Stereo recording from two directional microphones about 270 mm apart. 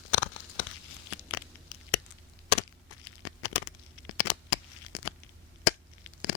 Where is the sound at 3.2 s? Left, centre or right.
Left.